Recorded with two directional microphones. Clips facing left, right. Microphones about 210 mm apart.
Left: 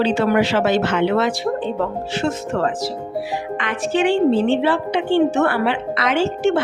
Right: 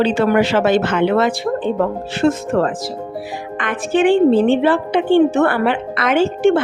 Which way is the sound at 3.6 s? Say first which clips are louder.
Right 4 dB; 50° right (ahead or behind).